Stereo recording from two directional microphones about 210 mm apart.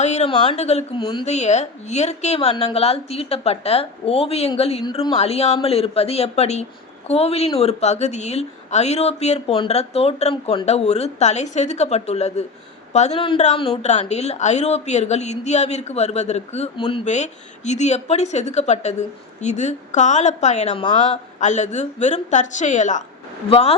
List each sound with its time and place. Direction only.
0.0 s a woman's voice: 30° left (ahead or behind)
21.3 s a woman's voice: 35° left (ahead or behind)